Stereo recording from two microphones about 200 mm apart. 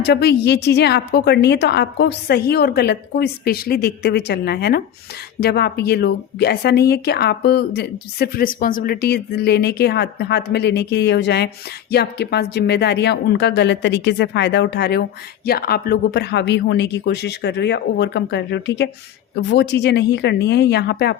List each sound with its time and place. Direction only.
0.0 s speech: 55° left (ahead or behind)